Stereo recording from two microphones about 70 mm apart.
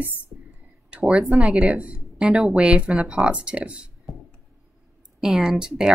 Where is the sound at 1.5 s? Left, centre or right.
Centre.